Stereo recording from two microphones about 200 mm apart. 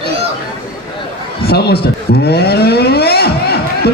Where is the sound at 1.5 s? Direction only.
55° left (ahead or behind).